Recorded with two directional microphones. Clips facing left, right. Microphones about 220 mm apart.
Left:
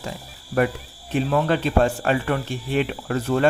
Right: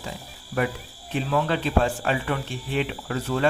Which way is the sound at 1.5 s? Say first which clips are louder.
Left 3 dB; 50° left (ahead or behind).